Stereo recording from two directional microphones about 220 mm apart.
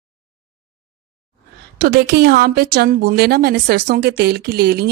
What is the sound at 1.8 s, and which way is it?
Speech, 45° right (ahead or behind).